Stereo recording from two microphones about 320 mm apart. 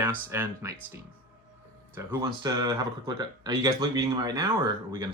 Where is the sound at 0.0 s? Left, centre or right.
Centre.